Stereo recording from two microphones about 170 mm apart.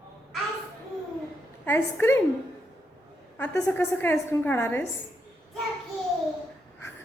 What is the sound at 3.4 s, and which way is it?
A woman's voice, 10° left (ahead or behind).